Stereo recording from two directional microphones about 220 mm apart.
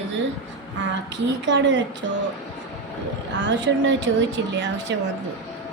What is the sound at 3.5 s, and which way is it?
A woman's voice, 55° right (ahead or behind).